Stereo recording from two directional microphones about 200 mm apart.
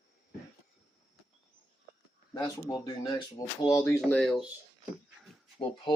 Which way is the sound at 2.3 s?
20° left (ahead or behind).